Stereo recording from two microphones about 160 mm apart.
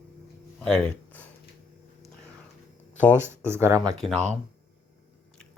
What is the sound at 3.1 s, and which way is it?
Speech, 15° right (ahead or behind).